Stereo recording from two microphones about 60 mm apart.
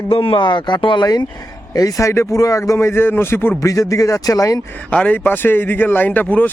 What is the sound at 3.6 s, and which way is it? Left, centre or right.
Speech, left.